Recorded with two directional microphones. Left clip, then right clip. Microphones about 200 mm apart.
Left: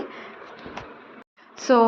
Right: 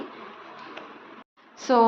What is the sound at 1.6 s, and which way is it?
Speech, 15° left (ahead or behind).